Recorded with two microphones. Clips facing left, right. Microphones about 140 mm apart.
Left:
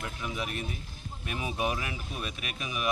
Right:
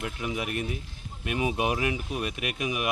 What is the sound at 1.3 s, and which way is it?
Speech, 10° right (ahead or behind).